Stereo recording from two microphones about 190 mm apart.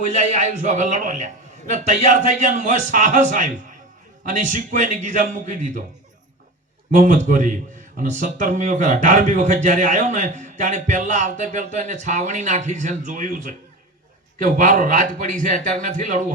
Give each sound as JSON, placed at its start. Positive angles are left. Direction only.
{"t": 0.0, "sound": "a man's voice", "side_deg": -40}
{"t": 6.9, "sound": "a man's voice", "side_deg": -40}